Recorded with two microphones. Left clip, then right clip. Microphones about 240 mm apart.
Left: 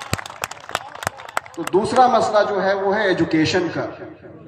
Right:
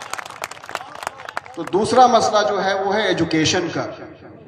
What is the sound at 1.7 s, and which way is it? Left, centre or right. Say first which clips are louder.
A man's voice: right 2 dB; right.